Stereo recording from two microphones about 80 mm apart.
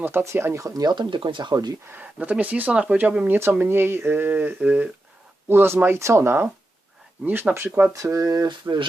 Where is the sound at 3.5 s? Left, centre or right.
Right.